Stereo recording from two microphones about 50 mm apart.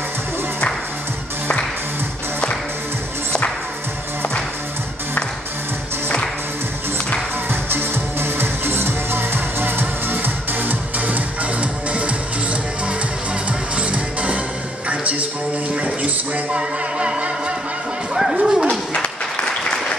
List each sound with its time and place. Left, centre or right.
7.7 s music: right
13.5 s music: right
15.7 s a sound: right
16.5 s music: centre
18.1 s a sound: centre
18.7 s applause: centre